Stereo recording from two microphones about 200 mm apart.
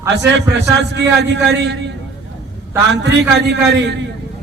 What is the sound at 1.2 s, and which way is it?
Speech, 60° right (ahead or behind).